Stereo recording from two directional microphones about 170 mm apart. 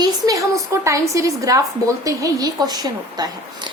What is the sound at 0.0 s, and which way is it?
A woman's voice, 20° right (ahead or behind).